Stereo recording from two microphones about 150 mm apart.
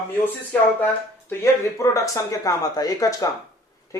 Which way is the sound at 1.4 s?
20° left (ahead or behind).